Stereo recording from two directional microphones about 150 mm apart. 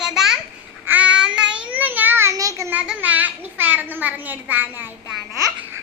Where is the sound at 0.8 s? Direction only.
10° right (ahead or behind).